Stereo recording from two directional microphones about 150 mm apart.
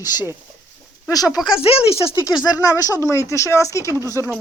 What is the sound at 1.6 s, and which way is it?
Speech, 40° left (ahead or behind).